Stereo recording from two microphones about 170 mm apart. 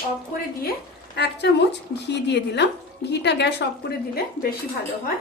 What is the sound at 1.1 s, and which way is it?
Speech, 80° left.